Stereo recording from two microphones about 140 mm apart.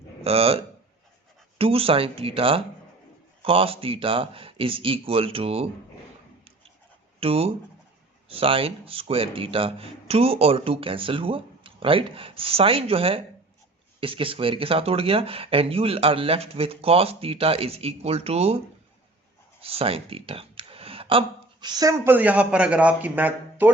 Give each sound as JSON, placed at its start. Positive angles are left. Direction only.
{"t": 0.3, "sound": "speech", "side_deg": -45}
{"t": 7.2, "sound": "speech", "side_deg": -45}
{"t": 19.6, "sound": "speech", "side_deg": -45}